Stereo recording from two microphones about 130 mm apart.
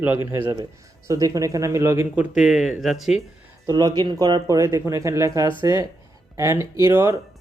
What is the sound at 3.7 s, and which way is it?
Speech, 30° right (ahead or behind).